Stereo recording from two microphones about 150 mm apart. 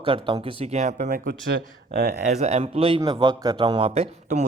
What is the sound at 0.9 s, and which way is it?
Speech, 75° right (ahead or behind).